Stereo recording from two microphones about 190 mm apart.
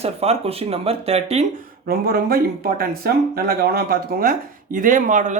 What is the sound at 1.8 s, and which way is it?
Speech, 55° right (ahead or behind).